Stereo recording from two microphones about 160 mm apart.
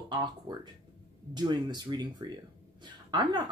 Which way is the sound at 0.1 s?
25° right (ahead or behind).